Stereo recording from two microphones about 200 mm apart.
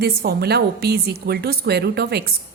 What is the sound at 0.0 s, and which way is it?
A woman's voice, 50° right (ahead or behind).